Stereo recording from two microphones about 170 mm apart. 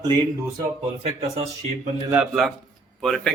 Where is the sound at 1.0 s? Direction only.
40° right (ahead or behind).